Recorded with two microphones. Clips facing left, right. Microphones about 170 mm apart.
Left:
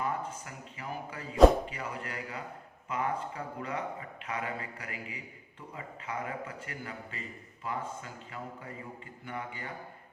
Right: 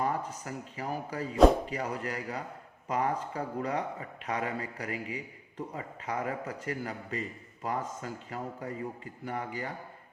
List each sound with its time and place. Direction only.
0.0 s a man's voice: 40° right (ahead or behind)